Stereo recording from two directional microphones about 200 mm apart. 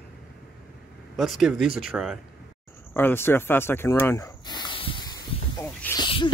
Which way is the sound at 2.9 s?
10° left (ahead or behind).